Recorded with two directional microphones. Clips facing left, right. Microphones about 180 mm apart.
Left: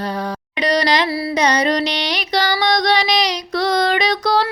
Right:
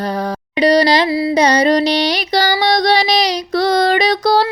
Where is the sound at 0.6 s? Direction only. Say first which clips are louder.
Right 6 dB; 30° right (ahead or behind).